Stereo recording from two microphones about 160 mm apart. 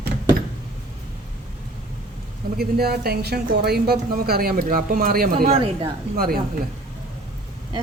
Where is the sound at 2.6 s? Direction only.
75° right (ahead or behind).